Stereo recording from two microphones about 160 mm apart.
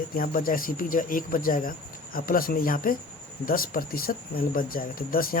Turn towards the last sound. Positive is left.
turn(degrees=65)  # may be behind; listen again after turning